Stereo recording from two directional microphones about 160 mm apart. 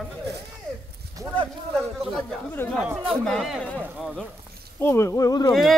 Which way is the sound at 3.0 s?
Centre (ahead or behind).